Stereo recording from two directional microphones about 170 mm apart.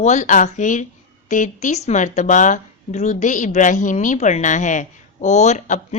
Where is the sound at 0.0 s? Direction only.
45° left (ahead or behind).